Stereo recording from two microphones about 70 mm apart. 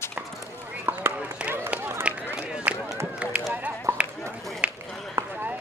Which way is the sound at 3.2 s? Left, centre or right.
Centre.